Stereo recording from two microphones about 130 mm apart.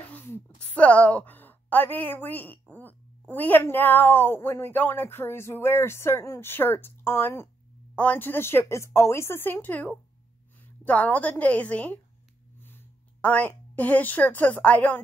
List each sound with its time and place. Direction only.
0.1 s a woman's voice: 15° left (ahead or behind)